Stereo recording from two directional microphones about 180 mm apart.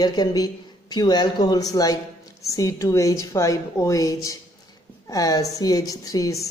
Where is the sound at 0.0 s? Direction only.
20° left (ahead or behind).